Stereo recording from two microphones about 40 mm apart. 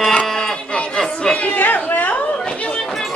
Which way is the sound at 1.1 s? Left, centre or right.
Left.